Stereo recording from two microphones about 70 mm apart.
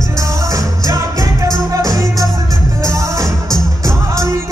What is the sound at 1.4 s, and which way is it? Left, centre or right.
Music, right.